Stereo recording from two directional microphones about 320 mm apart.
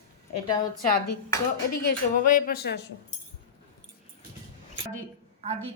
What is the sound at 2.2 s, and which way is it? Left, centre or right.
Speech, left.